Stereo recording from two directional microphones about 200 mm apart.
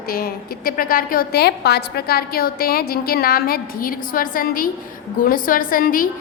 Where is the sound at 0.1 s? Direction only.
45° left (ahead or behind).